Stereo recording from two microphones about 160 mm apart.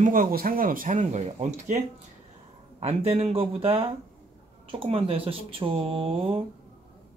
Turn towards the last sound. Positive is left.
turn(degrees=-35)  # may be behind; listen again after turning